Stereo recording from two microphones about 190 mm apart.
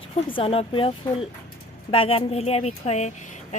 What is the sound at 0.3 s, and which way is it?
A woman's voice, 30° left (ahead or behind).